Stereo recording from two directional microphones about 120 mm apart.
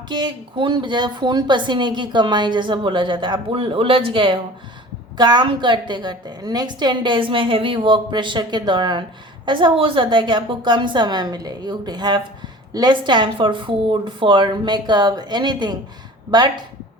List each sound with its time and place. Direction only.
0.1 s speech: 40° right (ahead or behind)